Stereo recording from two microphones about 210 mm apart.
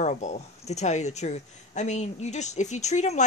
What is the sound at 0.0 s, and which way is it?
Speech, 35° left (ahead or behind).